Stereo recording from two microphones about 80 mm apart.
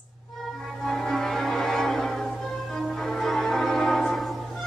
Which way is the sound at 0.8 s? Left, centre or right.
Centre.